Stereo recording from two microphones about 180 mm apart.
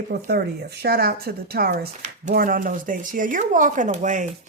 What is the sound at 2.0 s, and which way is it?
Speech, 45° right (ahead or behind).